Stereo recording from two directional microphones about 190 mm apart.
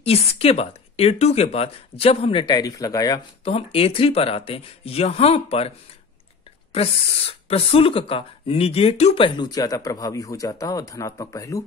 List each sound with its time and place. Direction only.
0.0 s speech: 30° left (ahead or behind)
3.4 s speech: 30° left (ahead or behind)
6.7 s speech: 30° left (ahead or behind); by 11.6 s 15° left (ahead or behind)